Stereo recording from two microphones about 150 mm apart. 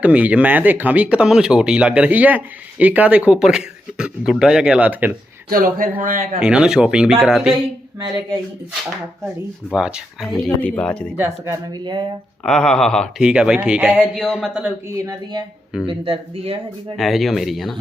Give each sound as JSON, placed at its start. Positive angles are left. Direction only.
{"t": 0.0, "sound": "speech", "side_deg": -10}
{"t": 5.5, "sound": "speech", "side_deg": -70}
{"t": 6.4, "sound": "speech", "side_deg": -5}
{"t": 7.9, "sound": "speech", "side_deg": -25}
{"t": 9.7, "sound": "speech", "side_deg": -5}
{"t": 11.2, "sound": "speech", "side_deg": -15}
{"t": 11.7, "sound": "speech", "side_deg": -30}
{"t": 12.4, "sound": "speech", "side_deg": 5}
{"t": 14.9, "sound": "speech", "side_deg": -25}
{"t": 15.9, "sound": "speech", "side_deg": -40}
{"t": 17.0, "sound": "speech", "side_deg": 0}